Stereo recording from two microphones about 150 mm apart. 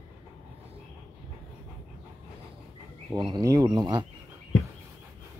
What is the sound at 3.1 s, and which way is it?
Speech, 30° right (ahead or behind).